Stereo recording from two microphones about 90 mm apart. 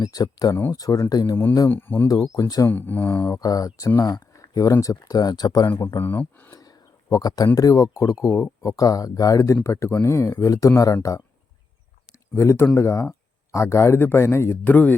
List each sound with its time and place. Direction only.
0.0 s speech: 45° left (ahead or behind)
1.7 s speech: 25° left (ahead or behind)
2.0 s speech: 40° left (ahead or behind)
2.6 s speech: 20° left (ahead or behind)
3.2 s speech: 40° left (ahead or behind)
5.6 s speech: 25° left (ahead or behind)
6.6 s a sound: 45° left (ahead or behind)
7.5 s speech: 40° left (ahead or behind)
12.3 s speech: 30° left (ahead or behind)